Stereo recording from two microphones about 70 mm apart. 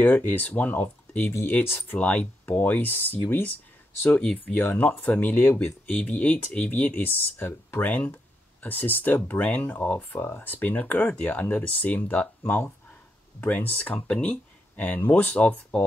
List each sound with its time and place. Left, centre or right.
0.0 s speech: left
1.6 s speech: left
2.0 s speech: left
5.9 s speech: left